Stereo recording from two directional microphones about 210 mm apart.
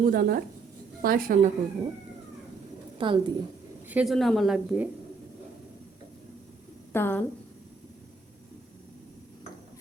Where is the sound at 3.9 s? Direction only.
5° right (ahead or behind).